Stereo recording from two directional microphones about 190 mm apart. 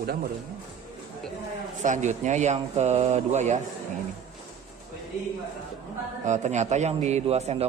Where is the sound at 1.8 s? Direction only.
40° right (ahead or behind).